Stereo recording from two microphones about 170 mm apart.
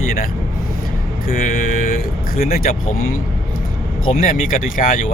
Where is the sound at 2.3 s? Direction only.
60° left (ahead or behind).